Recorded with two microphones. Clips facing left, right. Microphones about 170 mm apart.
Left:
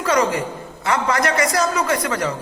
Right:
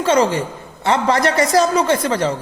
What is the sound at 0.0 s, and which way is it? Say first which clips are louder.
A man's voice: right 3 dB; 30° right (ahead or behind).